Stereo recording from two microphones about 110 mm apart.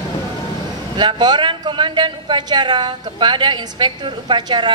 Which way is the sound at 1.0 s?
40° right (ahead or behind).